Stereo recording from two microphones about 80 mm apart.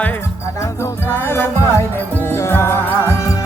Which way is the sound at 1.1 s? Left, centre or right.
Left.